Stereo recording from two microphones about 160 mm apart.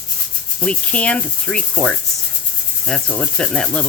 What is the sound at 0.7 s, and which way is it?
Rub, 5° left (ahead or behind).